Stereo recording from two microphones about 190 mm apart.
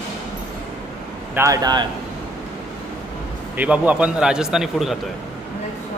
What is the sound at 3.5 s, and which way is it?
A man's voice, 10° right (ahead or behind).